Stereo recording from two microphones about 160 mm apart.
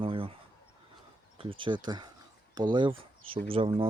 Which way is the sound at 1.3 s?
30° right (ahead or behind).